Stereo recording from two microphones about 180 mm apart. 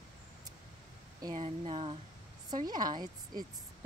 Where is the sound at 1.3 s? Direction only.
35° right (ahead or behind).